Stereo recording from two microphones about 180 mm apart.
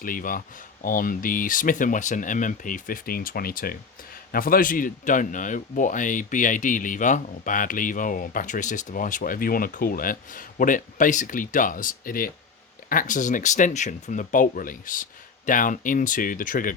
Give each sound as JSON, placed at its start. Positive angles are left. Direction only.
{"t": 0.0, "sound": "speech", "side_deg": 50}